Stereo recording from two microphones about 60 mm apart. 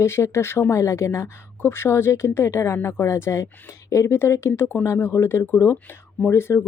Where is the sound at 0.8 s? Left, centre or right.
Left.